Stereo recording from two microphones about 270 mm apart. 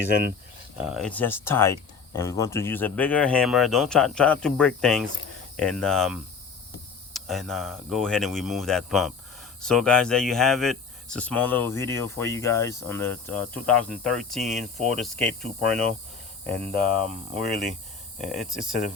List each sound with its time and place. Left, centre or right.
0.1 s speech: right
0.8 s speech: centre
18.2 s speech: centre